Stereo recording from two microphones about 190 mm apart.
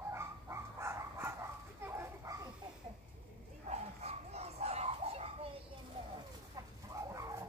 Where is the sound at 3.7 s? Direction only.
35° right (ahead or behind).